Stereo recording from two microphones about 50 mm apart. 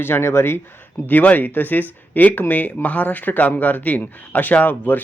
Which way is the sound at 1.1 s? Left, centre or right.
Left.